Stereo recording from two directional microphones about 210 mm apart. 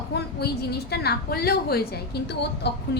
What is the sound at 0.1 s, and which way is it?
A woman's voice, 50° left (ahead or behind).